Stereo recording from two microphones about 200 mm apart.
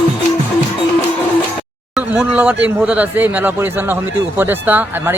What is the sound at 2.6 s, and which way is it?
A man's voice, 10° right (ahead or behind).